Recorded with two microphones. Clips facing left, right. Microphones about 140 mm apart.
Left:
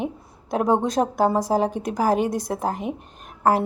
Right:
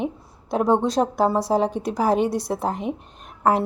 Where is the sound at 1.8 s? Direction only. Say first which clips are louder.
Even; 45° left (ahead or behind).